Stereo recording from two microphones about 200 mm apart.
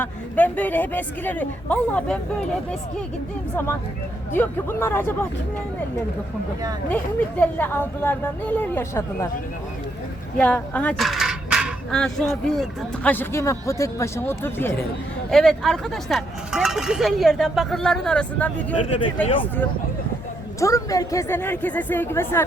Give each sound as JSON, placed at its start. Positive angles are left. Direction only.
{"t": 0.0, "sound": "speech", "side_deg": 10}
{"t": 4.4, "sound": "speech", "side_deg": 10}
{"t": 6.9, "sound": "speech", "side_deg": 10}
{"t": 10.3, "sound": "a sound", "side_deg": 5}
{"t": 12.3, "sound": "speech", "side_deg": 5}
{"t": 18.9, "sound": "speech", "side_deg": 25}
{"t": 20.6, "sound": "speech", "side_deg": 15}